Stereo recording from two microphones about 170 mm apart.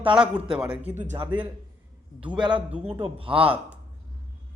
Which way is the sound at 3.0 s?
35° right (ahead or behind).